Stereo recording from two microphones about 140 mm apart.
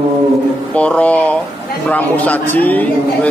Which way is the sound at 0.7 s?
10° left (ahead or behind).